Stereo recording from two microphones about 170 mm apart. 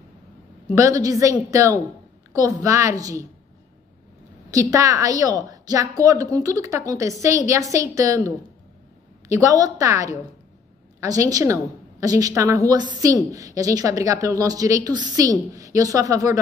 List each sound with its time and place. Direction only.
0.7 s a woman's voice: 20° right (ahead or behind)
4.5 s a woman's voice: 20° right (ahead or behind)
9.3 s a woman's voice: 20° right (ahead or behind)